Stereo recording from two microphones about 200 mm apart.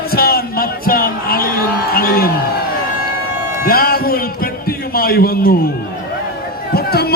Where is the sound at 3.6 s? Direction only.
50° left (ahead or behind).